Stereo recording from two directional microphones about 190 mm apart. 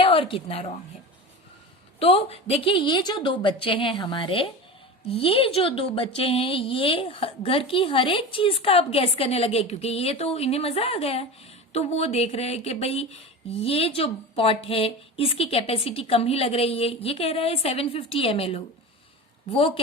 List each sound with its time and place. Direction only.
0.0 s a woman's voice: 30° left (ahead or behind)
2.0 s a woman's voice: 30° left (ahead or behind)